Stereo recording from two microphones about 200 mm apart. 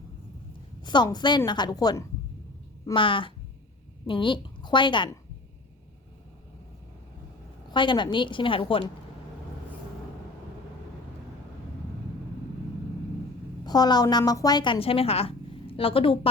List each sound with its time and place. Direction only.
0.8 s a woman's voice: 20° left (ahead or behind)
7.7 s a woman's voice: 25° left (ahead or behind)
13.7 s a woman's voice: 20° left (ahead or behind)